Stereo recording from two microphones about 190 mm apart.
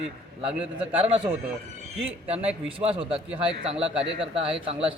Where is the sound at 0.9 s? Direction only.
30° right (ahead or behind).